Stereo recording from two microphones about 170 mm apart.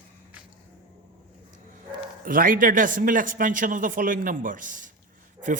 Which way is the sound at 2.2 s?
55° right (ahead or behind).